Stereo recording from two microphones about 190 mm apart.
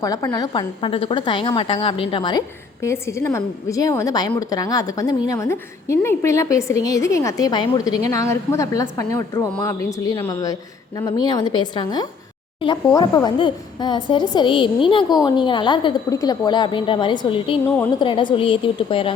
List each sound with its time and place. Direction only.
0.0 s a woman's voice: 20° left (ahead or behind)